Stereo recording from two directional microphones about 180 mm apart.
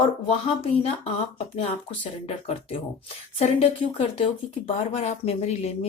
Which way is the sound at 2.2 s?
35° left (ahead or behind).